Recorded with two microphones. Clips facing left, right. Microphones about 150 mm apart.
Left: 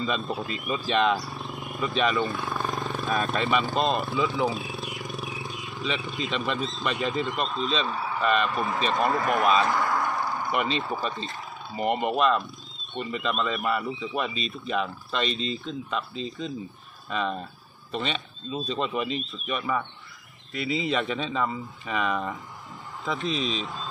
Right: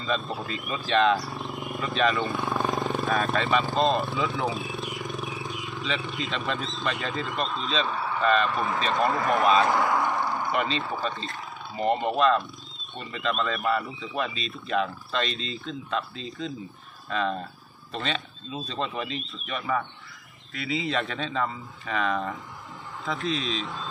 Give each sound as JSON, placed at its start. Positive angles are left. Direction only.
{"t": 0.0, "sound": "speech", "side_deg": 0}
{"t": 2.5, "sound": "wild animals", "side_deg": -20}
{"t": 3.1, "sound": "speech", "side_deg": 0}
{"t": 8.2, "sound": "speech", "side_deg": 10}
{"t": 8.5, "sound": "speech", "side_deg": 0}
{"t": 9.8, "sound": "a sound", "side_deg": 0}
{"t": 10.3, "sound": "speech", "side_deg": 0}
{"t": 18.7, "sound": "speech", "side_deg": 10}